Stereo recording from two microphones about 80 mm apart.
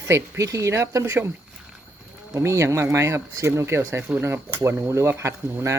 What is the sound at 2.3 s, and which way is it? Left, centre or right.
Speech, right.